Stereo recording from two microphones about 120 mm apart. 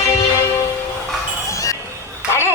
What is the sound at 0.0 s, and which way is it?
Music, 25° left (ahead or behind).